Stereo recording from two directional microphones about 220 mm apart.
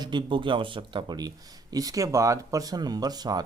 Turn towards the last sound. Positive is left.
turn(degrees=-20)  # may be behind; listen again after turning